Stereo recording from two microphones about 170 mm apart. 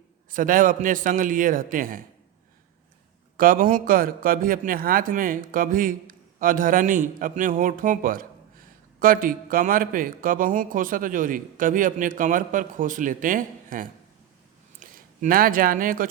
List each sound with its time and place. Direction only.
0.3 s a man's voice: 55° right (ahead or behind)
3.3 s a man's voice: 55° right (ahead or behind)